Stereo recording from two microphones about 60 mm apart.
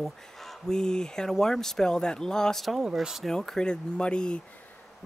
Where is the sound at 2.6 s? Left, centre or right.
Centre.